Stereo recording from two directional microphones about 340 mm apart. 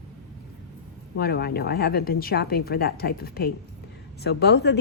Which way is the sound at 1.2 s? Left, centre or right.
Left.